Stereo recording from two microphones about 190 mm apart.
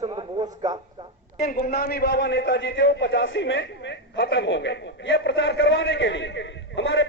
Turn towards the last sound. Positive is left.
turn(degrees=70)  # may be behind; listen again after turning